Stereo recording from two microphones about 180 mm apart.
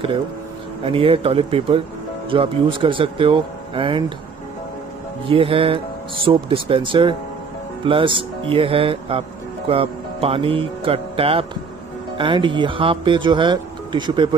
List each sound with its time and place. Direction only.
0.8 s speech: 30° right (ahead or behind)
5.2 s speech: 30° right (ahead or behind)